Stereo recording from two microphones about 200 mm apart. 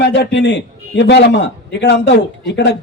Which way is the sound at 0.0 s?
60° left (ahead or behind).